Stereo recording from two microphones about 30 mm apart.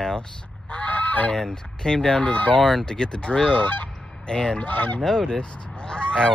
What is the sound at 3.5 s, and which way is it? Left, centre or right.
Goose, left.